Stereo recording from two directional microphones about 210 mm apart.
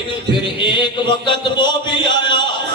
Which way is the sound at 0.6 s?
20° left (ahead or behind).